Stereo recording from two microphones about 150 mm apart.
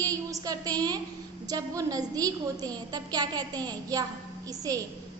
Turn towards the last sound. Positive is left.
turn(degrees=-25)  # may be behind; listen again after turning